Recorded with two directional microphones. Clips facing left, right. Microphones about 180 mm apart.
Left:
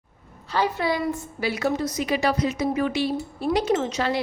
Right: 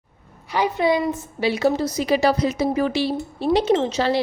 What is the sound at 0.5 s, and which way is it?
A woman's voice, 15° right (ahead or behind).